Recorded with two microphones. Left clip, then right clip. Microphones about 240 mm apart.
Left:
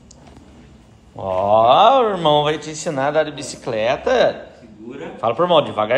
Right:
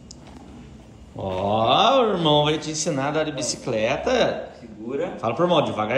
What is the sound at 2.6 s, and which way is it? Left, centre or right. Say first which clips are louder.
A man's voice: left 4 dB; centre.